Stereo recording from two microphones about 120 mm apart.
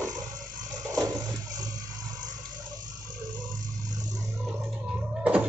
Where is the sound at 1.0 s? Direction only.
30° right (ahead or behind).